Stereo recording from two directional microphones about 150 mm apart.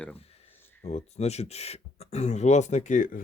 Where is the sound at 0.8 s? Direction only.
45° left (ahead or behind).